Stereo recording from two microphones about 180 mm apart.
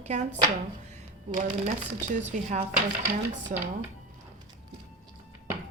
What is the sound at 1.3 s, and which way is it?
Speech, 45° right (ahead or behind).